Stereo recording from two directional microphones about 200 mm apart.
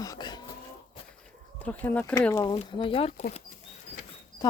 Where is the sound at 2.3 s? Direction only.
20° left (ahead or behind).